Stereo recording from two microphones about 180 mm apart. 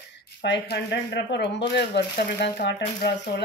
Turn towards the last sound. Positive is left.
turn(degrees=70)  # may be behind; listen again after turning